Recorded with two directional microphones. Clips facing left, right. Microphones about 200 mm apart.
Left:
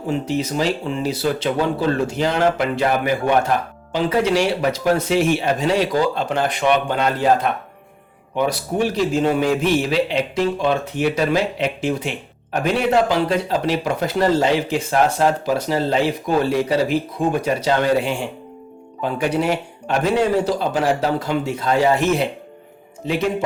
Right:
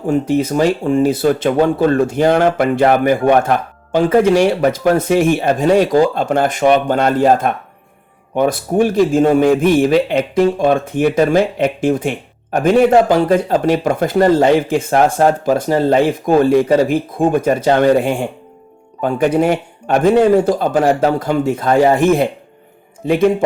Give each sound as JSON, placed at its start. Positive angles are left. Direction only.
{"t": 0.1, "sound": "a man's voice", "side_deg": -50}